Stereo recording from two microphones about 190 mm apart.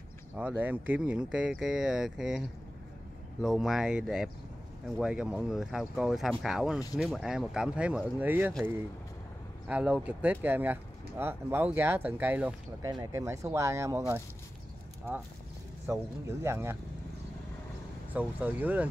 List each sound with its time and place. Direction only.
0.4 s speech: 10° right (ahead or behind)
3.4 s speech: centre (ahead or behind)
9.7 s speech: 10° right (ahead or behind)
12.8 s speech: 20° right (ahead or behind)
15.9 s speech: 15° right (ahead or behind)
18.1 s speech: 10° right (ahead or behind)